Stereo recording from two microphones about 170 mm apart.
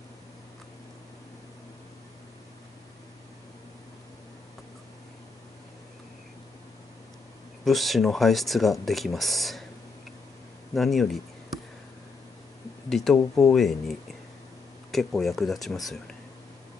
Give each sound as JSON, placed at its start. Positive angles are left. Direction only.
{"t": 7.6, "sound": "speech", "side_deg": 0}
{"t": 10.7, "sound": "a sound", "side_deg": 0}
{"t": 12.9, "sound": "speech", "side_deg": 0}